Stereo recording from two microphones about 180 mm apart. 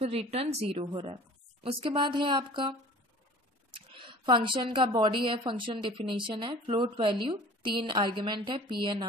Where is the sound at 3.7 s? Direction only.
25° right (ahead or behind).